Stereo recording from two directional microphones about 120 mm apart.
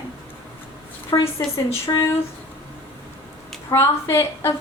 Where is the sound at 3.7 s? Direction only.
20° left (ahead or behind).